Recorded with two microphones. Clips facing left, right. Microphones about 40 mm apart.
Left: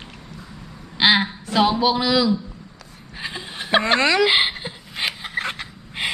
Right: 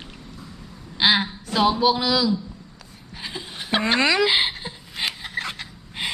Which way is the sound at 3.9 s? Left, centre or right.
Centre.